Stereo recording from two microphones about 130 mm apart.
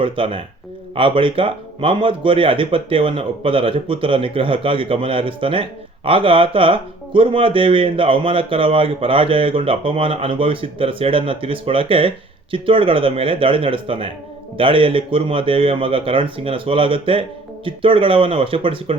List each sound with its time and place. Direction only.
0.0 s speech: 45° right (ahead or behind)